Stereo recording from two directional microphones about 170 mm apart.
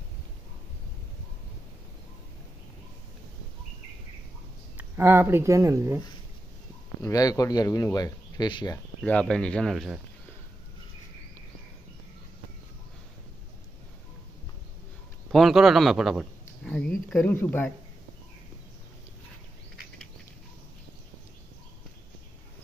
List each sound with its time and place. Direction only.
4.7 s speech: 15° right (ahead or behind)
7.0 s speech: 20° left (ahead or behind)
9.0 s speech: 5° left (ahead or behind)
15.3 s a man's voice: centre (ahead or behind)